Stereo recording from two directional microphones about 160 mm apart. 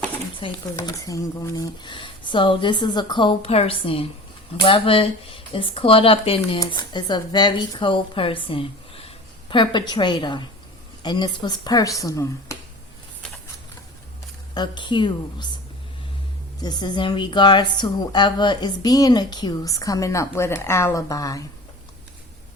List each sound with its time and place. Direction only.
0.3 s speech: 30° left (ahead or behind)
0.9 s a woman's voice: 20° left (ahead or behind)
14.5 s a woman's voice: 30° left (ahead or behind)
16.6 s a woman's voice: 25° left (ahead or behind)